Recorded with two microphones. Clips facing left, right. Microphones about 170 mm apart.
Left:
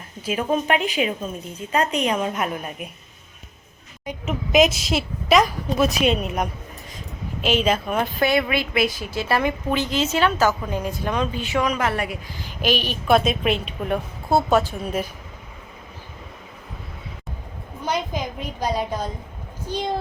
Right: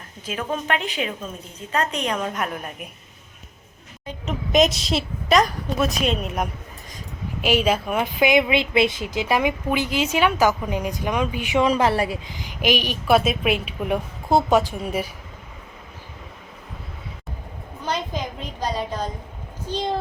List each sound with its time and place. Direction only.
0.3 s a woman's voice: 15° left (ahead or behind)
4.0 s a woman's voice: 10° left (ahead or behind); by 11.6 s 15° right (ahead or behind)
11.6 s speech: 30° right (ahead or behind)
12.4 s a woman's voice: 15° right (ahead or behind)
17.8 s a sound: 10° left (ahead or behind)